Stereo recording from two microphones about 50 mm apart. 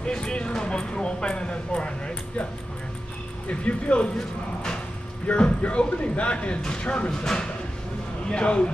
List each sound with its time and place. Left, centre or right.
0.0 s speech: centre
3.4 s speech: left
5.2 s speech: left